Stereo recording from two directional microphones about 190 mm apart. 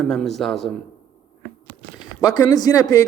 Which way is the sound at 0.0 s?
5° left (ahead or behind).